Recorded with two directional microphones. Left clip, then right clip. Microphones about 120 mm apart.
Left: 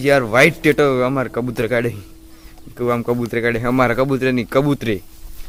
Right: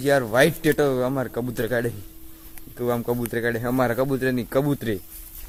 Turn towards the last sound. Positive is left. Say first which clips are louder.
# left 6 dB
turn(degrees=5)  # may be behind; listen again after turning